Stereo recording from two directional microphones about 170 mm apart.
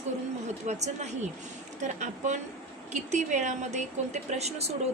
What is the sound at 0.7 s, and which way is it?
A woman's voice, 40° right (ahead or behind).